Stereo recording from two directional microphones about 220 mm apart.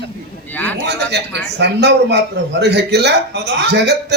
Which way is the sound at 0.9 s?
50° right (ahead or behind).